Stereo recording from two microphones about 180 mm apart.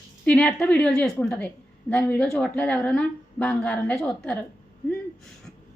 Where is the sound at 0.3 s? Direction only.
5° left (ahead or behind).